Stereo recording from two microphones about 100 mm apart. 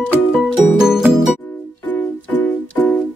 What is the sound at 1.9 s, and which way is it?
Music, 15° left (ahead or behind).